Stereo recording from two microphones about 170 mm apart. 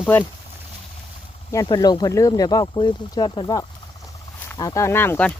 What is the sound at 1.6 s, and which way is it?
Speech, 25° left (ahead or behind).